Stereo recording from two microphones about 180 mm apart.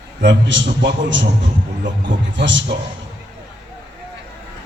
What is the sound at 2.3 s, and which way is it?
Speech, 90° right.